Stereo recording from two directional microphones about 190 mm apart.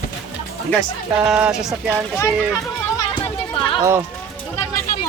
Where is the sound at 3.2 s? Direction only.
25° left (ahead or behind).